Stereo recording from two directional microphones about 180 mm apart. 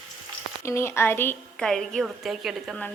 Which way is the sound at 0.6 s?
15° left (ahead or behind).